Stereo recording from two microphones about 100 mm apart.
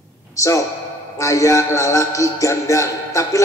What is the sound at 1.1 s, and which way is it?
Music, 30° left (ahead or behind).